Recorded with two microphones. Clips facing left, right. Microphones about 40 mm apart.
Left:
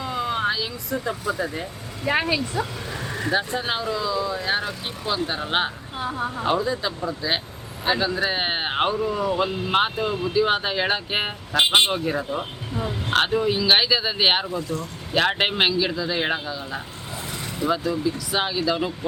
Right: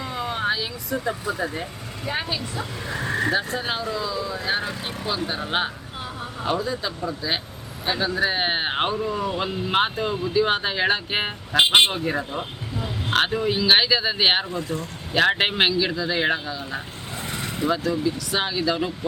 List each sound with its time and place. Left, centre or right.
0.0 s vehicle: centre
0.9 s speech: centre
2.0 s speech: left
2.8 s a sound: right
3.3 s speech: centre